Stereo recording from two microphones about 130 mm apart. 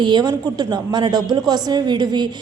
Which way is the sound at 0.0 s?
35° right (ahead or behind).